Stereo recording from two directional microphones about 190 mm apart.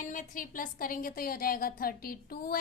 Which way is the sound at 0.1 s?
45° left (ahead or behind).